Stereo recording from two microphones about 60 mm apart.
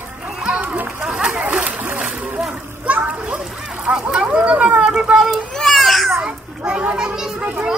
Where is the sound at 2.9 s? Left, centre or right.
Right.